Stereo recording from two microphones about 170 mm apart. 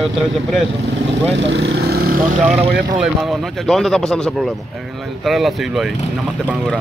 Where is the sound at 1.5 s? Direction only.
90° right; by 2.2 s 65° right (ahead or behind).